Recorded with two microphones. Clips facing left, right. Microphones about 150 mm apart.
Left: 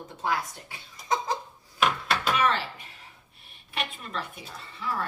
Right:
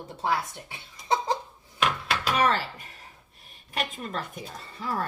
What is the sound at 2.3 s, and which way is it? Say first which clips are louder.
Speech: right 2 dB; 40° right (ahead or behind).